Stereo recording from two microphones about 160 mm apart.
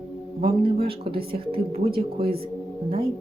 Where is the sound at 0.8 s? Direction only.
35° right (ahead or behind).